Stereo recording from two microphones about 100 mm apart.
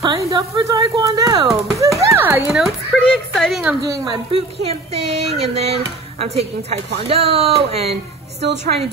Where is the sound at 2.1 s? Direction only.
25° right (ahead or behind).